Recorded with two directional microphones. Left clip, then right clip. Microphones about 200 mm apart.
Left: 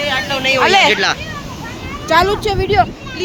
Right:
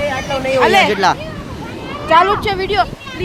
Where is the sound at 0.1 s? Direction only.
20° right (ahead or behind).